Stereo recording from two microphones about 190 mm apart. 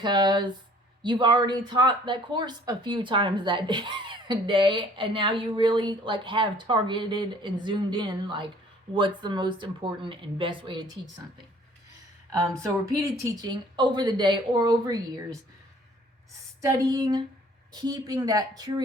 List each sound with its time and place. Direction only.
0.0 s speech: 25° right (ahead or behind)
13.0 s speech: 25° right (ahead or behind)
16.6 s speech: 15° right (ahead or behind)